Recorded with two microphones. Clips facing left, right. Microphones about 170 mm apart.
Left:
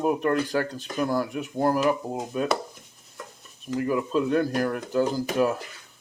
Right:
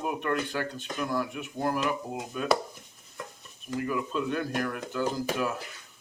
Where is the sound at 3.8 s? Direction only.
35° left (ahead or behind).